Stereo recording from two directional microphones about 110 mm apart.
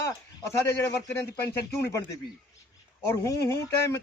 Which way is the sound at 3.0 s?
25° left (ahead or behind).